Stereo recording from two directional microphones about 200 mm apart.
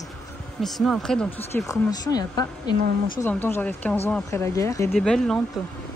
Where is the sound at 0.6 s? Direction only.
Centre (ahead or behind).